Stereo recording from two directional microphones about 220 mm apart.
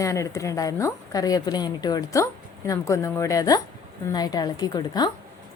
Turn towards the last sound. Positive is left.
turn(degrees=20)  # may be behind; listen again after turning